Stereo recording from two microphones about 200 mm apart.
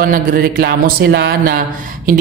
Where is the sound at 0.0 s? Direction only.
45° right (ahead or behind).